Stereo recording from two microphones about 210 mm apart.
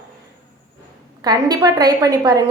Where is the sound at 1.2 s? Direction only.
20° right (ahead or behind).